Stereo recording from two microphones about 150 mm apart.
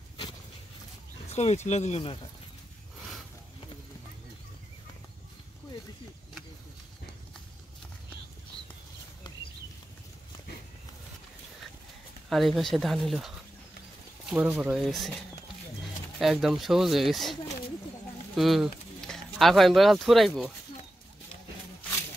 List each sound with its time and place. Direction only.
1.3 s speech: 45° left (ahead or behind)
12.3 s speech: centre (ahead or behind)
14.3 s speech: 10° right (ahead or behind)
16.2 s speech: centre (ahead or behind)